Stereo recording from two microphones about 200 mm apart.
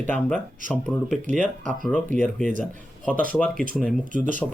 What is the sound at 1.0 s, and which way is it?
Speech, 40° right (ahead or behind).